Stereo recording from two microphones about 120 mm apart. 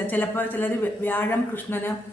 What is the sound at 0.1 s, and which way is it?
A woman's voice, 15° left (ahead or behind).